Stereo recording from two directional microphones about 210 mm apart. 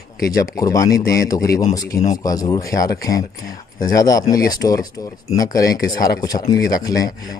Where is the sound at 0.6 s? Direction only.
15° left (ahead or behind).